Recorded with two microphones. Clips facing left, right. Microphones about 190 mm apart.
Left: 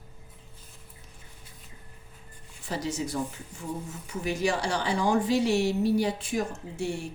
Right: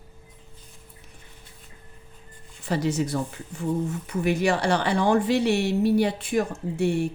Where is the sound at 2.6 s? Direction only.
65° right (ahead or behind).